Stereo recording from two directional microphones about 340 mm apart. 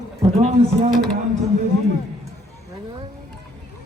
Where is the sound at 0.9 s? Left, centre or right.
Centre.